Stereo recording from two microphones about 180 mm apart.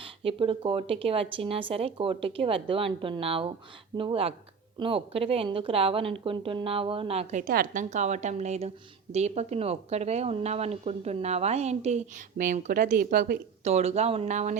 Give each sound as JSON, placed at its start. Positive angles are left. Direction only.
{"t": 0.0, "sound": "speech", "side_deg": -30}
{"t": 13.7, "sound": "speech", "side_deg": -35}